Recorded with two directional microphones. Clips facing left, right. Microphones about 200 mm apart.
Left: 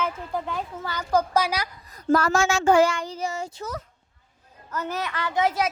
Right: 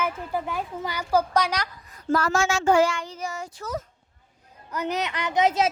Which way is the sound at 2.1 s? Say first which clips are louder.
Left 2 dB; 45° left (ahead or behind).